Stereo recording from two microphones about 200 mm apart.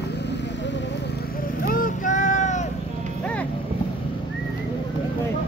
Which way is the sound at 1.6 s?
45° left (ahead or behind).